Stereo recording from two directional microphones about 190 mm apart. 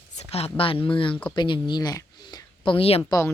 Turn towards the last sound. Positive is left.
turn(degrees=30)  # may be behind; listen again after turning